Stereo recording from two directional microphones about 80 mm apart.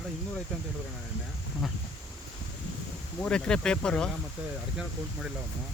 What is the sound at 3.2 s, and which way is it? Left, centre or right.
Speech, centre.